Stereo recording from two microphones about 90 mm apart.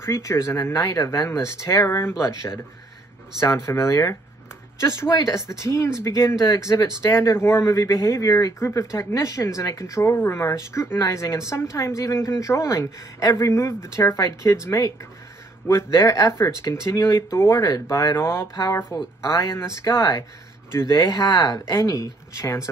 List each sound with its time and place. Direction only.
0.0 s speech: 30° left (ahead or behind)
7.1 s speech: 30° left (ahead or behind)
17.6 s speech: 45° left (ahead or behind)
20.0 s speech: 45° left (ahead or behind)
20.7 s speech: 30° left (ahead or behind)
21.3 s speech: 50° left (ahead or behind)
21.7 s speech: 40° left (ahead or behind)